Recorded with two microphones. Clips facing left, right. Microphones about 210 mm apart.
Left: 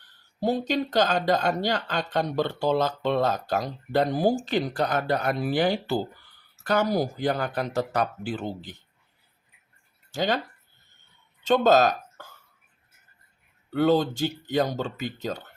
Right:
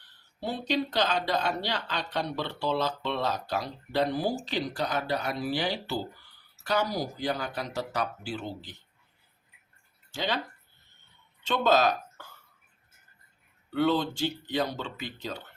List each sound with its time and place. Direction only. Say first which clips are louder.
0.3 s speech: left 5 dB; 45° left (ahead or behind)
10.1 s speech: left 5 dB; 45° left (ahead or behind)
11.4 s speech: left 5 dB; 45° left (ahead or behind)
13.7 s speech: left 4 dB; 45° left (ahead or behind)